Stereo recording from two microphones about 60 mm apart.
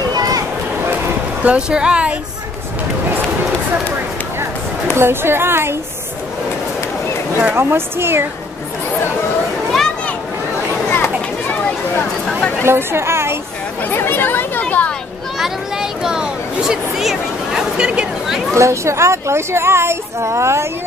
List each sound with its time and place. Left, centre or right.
0.1 s a sound: right
1.4 s speech: centre
4.9 s a woman's voice: right
7.5 s a woman's voice: right
10.9 s children playing: left
12.6 s speech: right
13.8 s speech: left
14.6 s a sound: left
15.3 s a sound: centre
18.5 s speech: right